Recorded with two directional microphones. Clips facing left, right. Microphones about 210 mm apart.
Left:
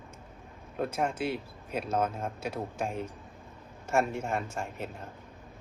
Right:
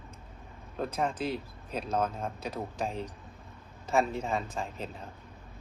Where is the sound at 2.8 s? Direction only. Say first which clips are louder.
Left 1 dB; 35° right (ahead or behind).